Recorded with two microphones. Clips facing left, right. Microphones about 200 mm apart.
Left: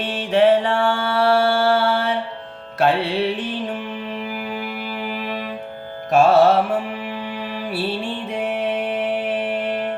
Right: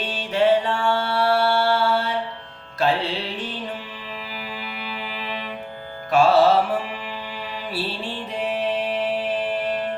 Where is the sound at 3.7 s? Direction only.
50° left (ahead or behind).